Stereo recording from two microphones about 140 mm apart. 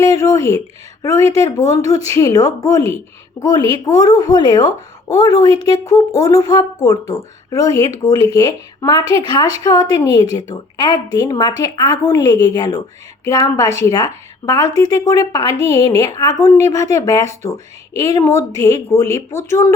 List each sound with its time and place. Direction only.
0.0 s speech: 25° left (ahead or behind)